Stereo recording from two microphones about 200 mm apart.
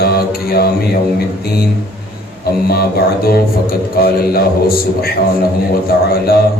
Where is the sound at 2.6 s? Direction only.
50° left (ahead or behind).